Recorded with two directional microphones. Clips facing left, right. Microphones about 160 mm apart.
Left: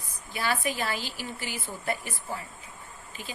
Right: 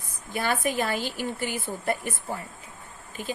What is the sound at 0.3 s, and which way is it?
A woman's voice, 50° right (ahead or behind).